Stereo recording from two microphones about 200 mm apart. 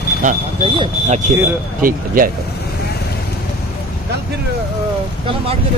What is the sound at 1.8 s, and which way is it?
Speech, 45° right (ahead or behind).